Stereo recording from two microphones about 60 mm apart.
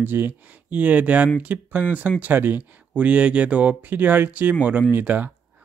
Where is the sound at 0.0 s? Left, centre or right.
Right.